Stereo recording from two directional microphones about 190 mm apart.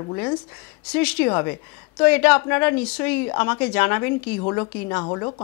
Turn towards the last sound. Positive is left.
turn(degrees=20)  # may be behind; listen again after turning